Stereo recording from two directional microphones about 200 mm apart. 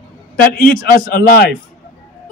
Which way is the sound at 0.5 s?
45° left (ahead or behind).